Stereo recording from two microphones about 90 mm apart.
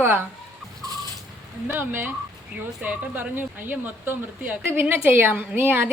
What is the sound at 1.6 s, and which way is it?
Speech, 20° right (ahead or behind).